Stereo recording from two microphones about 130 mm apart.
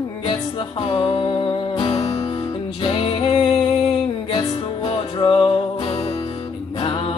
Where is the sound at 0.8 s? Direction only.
50° left (ahead or behind).